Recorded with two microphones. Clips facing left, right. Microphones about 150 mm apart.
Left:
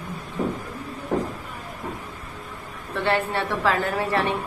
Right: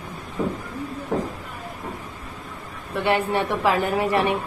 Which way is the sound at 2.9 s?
15° right (ahead or behind).